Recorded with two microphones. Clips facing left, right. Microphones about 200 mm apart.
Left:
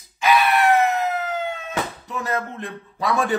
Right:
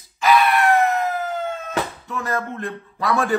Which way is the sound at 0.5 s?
Centre (ahead or behind).